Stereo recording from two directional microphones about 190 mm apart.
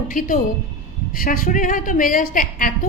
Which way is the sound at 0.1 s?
45° left (ahead or behind).